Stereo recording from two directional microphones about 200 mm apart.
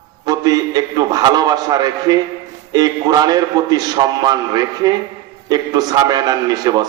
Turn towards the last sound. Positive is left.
turn(degrees=-20)  # may be behind; listen again after turning